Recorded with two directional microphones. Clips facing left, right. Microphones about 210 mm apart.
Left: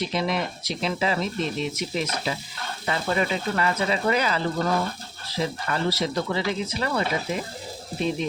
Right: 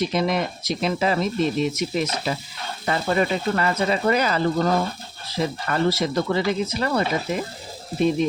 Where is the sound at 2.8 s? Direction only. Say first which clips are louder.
Right 4 dB; 45° right (ahead or behind).